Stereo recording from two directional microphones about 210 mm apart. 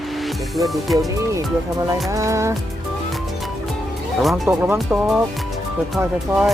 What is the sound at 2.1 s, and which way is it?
Speech, 15° right (ahead or behind).